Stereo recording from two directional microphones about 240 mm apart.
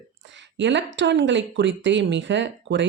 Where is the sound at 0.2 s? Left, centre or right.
Right.